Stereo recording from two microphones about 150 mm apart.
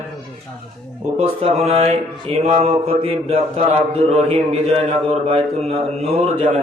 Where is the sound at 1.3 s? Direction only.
35° right (ahead or behind).